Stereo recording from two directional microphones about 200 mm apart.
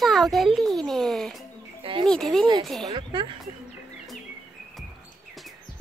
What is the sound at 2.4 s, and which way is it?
Speech, 20° right (ahead or behind).